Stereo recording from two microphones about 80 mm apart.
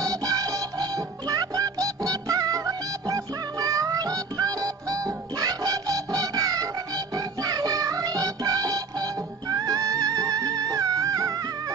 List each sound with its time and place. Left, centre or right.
0.0 s music: right